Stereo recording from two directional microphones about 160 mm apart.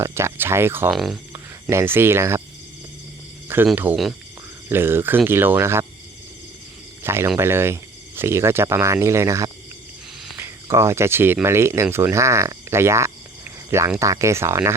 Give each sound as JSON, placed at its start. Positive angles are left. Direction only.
{"t": 0.0, "sound": "speech", "side_deg": -15}
{"t": 0.9, "sound": "speech", "side_deg": 0}
{"t": 1.7, "sound": "speech", "side_deg": -15}
{"t": 3.5, "sound": "speech", "side_deg": -15}
{"t": 7.0, "sound": "speech", "side_deg": -15}